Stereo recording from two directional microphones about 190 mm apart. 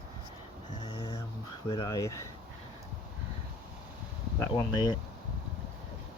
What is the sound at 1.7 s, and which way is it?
Speech, 20° left (ahead or behind).